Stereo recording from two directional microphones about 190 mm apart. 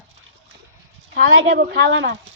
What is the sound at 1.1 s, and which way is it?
A child's voice, 80° right.